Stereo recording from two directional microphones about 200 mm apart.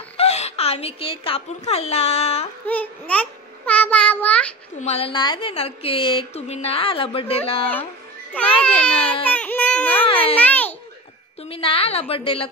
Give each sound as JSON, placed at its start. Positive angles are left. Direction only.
{"t": 0.2, "sound": "speech", "side_deg": 30}
{"t": 2.6, "sound": "child singing", "side_deg": 10}
{"t": 4.7, "sound": "a woman's voice", "side_deg": 30}
{"t": 8.3, "sound": "a child's voice", "side_deg": 5}
{"t": 9.2, "sound": "baby cry", "side_deg": 5}
{"t": 10.0, "sound": "a child's voice", "side_deg": 25}
{"t": 10.3, "sound": "a sound", "side_deg": 5}
{"t": 11.4, "sound": "a woman's voice", "side_deg": 30}